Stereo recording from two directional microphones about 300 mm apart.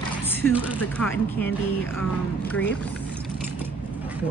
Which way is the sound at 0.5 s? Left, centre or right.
Centre.